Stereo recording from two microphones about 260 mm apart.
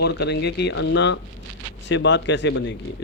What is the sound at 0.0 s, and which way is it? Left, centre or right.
Speech, left.